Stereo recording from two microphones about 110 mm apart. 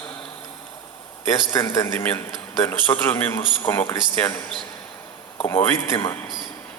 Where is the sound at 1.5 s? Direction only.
20° left (ahead or behind).